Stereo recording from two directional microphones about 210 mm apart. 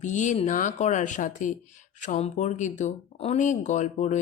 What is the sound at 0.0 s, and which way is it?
Speech, 35° left (ahead or behind).